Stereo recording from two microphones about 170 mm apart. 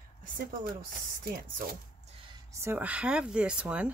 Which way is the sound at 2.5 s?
15° right (ahead or behind).